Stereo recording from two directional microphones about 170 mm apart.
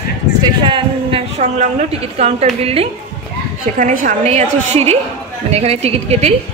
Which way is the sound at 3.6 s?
50° right (ahead or behind).